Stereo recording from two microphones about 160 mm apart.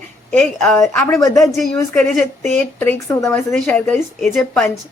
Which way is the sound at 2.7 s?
15° left (ahead or behind).